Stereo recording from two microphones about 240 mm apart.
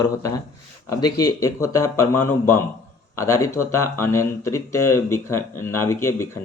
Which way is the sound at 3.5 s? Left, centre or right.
Left.